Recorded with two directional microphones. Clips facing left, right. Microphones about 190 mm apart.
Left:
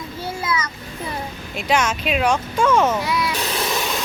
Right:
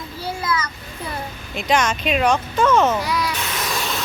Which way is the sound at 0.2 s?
25° left (ahead or behind).